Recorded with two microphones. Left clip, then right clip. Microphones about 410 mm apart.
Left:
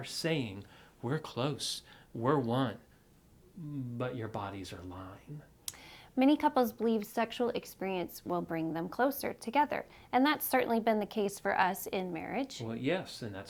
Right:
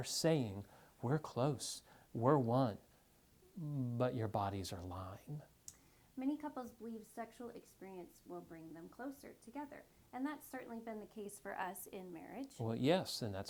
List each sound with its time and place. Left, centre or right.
0.0 s speech: right
1.0 s speech: right
3.9 s speech: right
6.1 s a woman's voice: left
12.6 s speech: right